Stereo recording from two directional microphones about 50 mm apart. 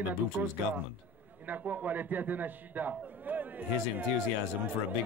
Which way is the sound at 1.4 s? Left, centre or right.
Right.